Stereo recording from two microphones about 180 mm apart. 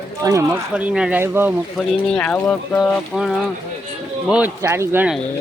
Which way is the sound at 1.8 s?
5° left (ahead or behind).